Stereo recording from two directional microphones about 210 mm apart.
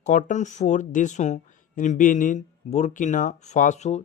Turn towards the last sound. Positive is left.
turn(degrees=35)  # may be behind; listen again after turning